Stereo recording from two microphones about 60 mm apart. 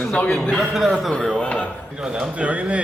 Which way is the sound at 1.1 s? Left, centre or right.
Centre.